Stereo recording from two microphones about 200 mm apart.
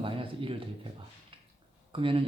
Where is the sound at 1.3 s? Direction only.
25° right (ahead or behind).